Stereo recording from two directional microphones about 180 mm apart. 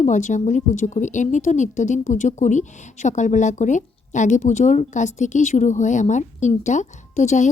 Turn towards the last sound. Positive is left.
turn(degrees=40)  # may be behind; listen again after turning